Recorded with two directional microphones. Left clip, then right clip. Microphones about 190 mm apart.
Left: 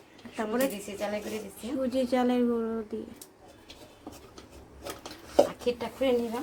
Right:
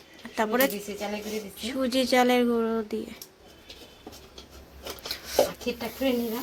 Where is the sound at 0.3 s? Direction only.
15° right (ahead or behind).